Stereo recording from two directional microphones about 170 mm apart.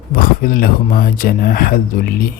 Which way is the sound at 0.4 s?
55° left (ahead or behind).